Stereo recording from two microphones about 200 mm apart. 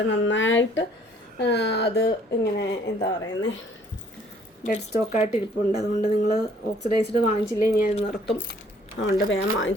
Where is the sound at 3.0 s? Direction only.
20° left (ahead or behind).